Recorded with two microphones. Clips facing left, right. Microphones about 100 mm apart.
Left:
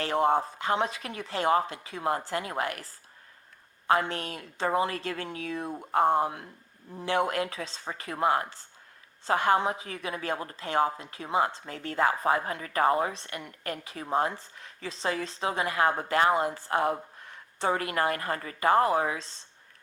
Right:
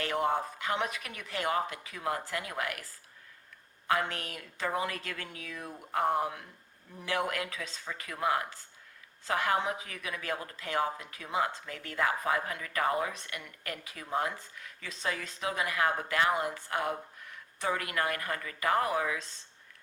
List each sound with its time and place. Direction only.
0.0 s speech: 30° left (ahead or behind)
4.1 s speech: 30° left (ahead or behind)